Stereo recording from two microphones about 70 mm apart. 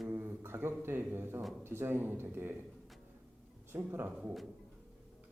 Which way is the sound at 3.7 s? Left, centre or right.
Right.